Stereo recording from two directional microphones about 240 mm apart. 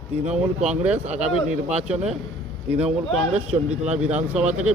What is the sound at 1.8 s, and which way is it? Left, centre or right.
Speech, right.